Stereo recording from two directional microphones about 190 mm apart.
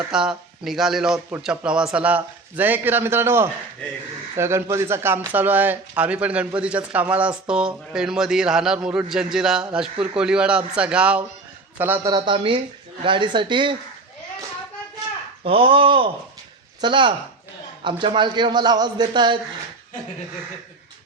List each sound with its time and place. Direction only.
0.1 s speech: 5° right (ahead or behind); by 13.7 s 25° right (ahead or behind)
15.4 s speech: 30° right (ahead or behind)